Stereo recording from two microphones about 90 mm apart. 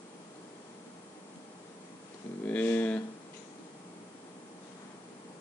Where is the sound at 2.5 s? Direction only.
20° left (ahead or behind).